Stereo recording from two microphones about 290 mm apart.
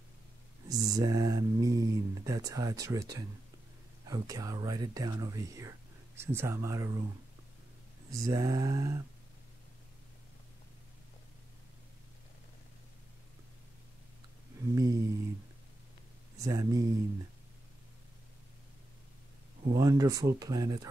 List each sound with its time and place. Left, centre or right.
0.7 s speech: centre
8.1 s speech: centre
14.8 s speech: centre
16.3 s speech: centre
19.7 s speech: centre